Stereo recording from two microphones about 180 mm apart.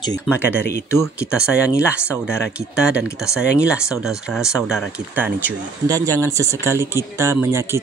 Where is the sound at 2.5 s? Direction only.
5° right (ahead or behind).